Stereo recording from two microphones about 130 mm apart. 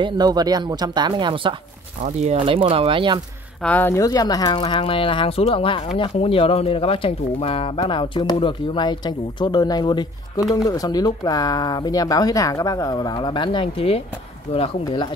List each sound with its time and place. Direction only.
0.0 s speech: 30° right (ahead or behind)
2.0 s speech: 65° right (ahead or behind)
2.3 s speech: 45° right (ahead or behind)
3.6 s speech: 15° left (ahead or behind); by 15.0 s 45° left (ahead or behind)